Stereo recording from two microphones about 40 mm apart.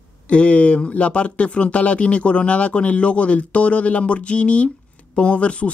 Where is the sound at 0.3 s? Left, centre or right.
Left.